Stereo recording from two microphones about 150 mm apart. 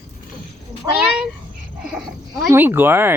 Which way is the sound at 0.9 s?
5° right (ahead or behind).